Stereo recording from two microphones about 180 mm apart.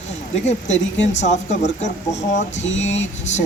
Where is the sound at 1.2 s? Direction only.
40° left (ahead or behind).